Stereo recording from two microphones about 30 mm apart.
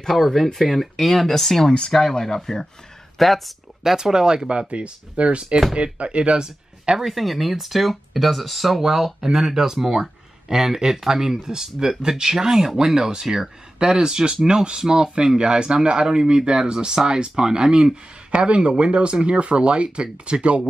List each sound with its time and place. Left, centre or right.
0.1 s speech: centre
1.9 s speech: centre
3.2 s speech: centre
3.8 s speech: centre
4.5 s speech: right
6.4 s speech: right
7.1 s speech: centre; by 20.6 s right